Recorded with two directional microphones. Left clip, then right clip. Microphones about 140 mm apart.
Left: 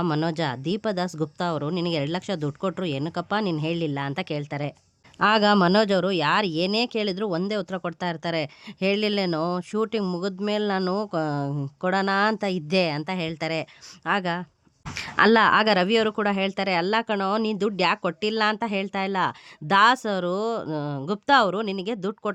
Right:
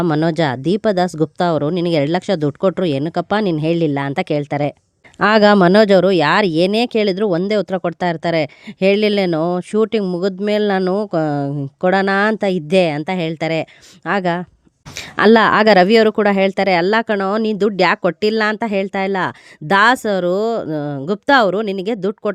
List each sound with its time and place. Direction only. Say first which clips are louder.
0.0 s speech: right 9 dB; 50° right (ahead or behind)